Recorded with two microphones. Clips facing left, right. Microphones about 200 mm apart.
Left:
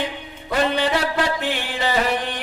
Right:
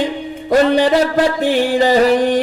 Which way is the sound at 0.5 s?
40° right (ahead or behind).